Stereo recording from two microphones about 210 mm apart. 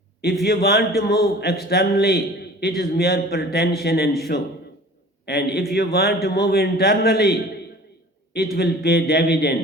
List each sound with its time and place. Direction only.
0.4 s a man's voice: 50° left (ahead or behind)